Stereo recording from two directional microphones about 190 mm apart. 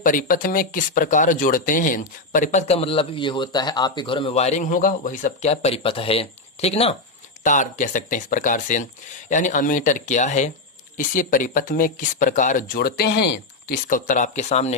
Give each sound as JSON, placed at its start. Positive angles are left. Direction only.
{"t": 0.0, "sound": "speech", "side_deg": 45}